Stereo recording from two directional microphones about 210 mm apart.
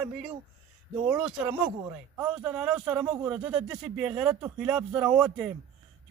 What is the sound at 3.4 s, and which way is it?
Speech, 25° right (ahead or behind).